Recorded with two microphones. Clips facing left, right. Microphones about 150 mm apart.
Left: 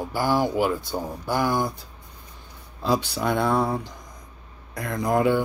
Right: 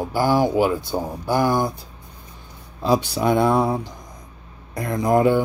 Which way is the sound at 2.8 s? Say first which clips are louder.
Right 4 dB; 15° right (ahead or behind).